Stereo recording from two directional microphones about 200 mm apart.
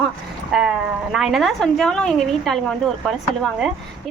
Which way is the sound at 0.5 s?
Centre (ahead or behind).